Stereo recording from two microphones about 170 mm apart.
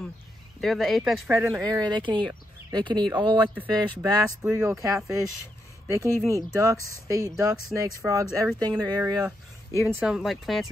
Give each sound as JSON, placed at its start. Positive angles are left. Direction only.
{"t": 0.6, "sound": "speech", "side_deg": 0}
{"t": 1.3, "sound": "speech", "side_deg": -15}
{"t": 3.5, "sound": "speech", "side_deg": -15}
{"t": 5.9, "sound": "speech", "side_deg": -20}
{"t": 9.9, "sound": "speech", "side_deg": 0}